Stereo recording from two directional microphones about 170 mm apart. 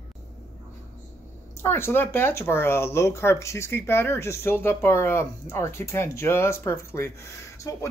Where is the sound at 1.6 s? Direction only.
15° left (ahead or behind).